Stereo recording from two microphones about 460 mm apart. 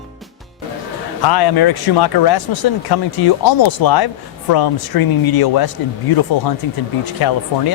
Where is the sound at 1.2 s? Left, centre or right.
Left.